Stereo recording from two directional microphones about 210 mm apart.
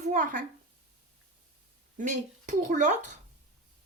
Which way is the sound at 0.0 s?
35° right (ahead or behind).